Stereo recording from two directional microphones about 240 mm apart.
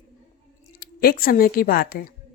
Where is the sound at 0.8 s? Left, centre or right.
Left.